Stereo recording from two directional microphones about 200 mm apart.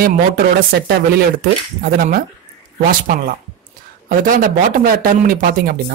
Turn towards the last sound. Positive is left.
turn(degrees=-45)  # may be behind; listen again after turning